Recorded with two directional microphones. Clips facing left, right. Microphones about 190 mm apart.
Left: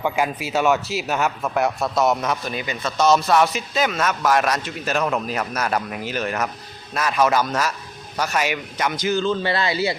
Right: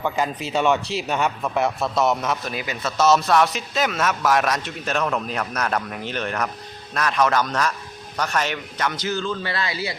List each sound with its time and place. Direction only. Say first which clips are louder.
0.0 s a man's voice: left 2 dB; 10° left (ahead or behind); by 9.9 s 25° left (ahead or behind)